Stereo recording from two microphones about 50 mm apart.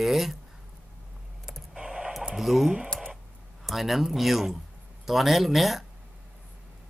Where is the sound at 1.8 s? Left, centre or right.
Centre.